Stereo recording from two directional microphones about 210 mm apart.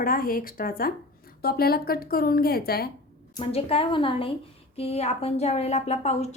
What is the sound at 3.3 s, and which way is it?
A woman's voice, 25° left (ahead or behind).